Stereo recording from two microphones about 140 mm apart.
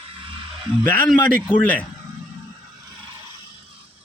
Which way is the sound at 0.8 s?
15° left (ahead or behind).